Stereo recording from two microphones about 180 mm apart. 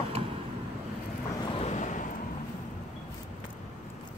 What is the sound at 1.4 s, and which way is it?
Vehicle, 35° left (ahead or behind).